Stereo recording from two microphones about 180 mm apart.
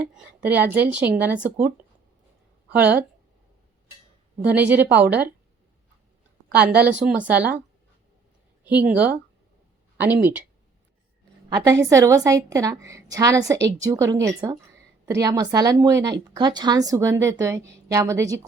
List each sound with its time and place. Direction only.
0.0 s a sound: 5° right (ahead or behind)
0.7 s a woman's voice: 10° right (ahead or behind)
4.4 s a woman's voice: 10° right (ahead or behind)
6.5 s a woman's voice: 65° right (ahead or behind)
7.3 s a woman's voice: 10° right (ahead or behind)
8.6 s a woman's voice: 10° right (ahead or behind)
11.4 s a woman's voice: 20° right (ahead or behind)